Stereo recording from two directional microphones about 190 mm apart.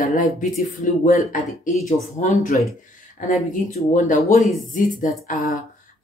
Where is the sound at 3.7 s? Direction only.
40° left (ahead or behind).